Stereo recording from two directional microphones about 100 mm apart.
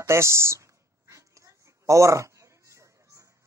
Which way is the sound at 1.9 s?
30° right (ahead or behind).